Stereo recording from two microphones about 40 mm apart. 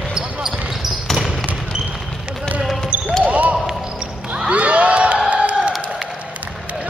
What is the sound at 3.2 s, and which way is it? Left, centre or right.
Basketball bounce, right.